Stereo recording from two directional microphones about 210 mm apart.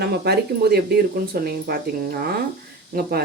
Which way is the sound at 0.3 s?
50° right (ahead or behind).